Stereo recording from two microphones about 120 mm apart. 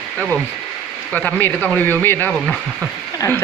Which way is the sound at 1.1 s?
10° left (ahead or behind).